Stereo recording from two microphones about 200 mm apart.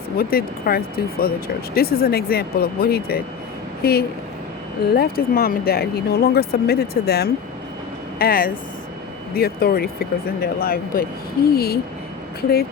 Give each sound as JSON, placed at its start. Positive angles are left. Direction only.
{"t": 0.2, "sound": "speech", "side_deg": 50}